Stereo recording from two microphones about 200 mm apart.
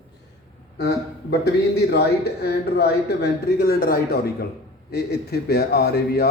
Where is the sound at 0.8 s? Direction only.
55° left (ahead or behind).